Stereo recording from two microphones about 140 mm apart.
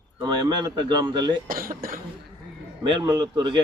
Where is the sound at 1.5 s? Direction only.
90° right.